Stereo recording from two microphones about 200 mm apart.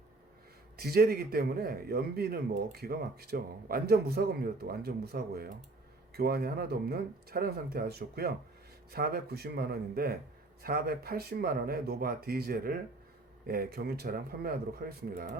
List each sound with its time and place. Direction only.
0.8 s speech: 50° right (ahead or behind)